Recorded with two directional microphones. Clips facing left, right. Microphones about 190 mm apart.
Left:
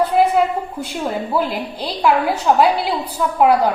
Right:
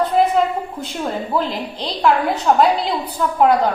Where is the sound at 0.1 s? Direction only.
10° left (ahead or behind).